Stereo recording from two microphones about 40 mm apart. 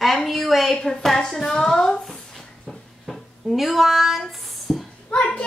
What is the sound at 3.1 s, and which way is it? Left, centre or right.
Speech, centre.